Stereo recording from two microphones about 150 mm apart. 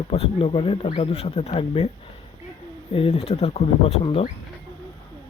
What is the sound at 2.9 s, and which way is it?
Speech, 40° left (ahead or behind).